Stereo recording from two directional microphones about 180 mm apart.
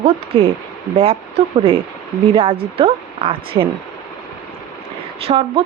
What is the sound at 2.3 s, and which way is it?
A woman's voice, 30° right (ahead or behind).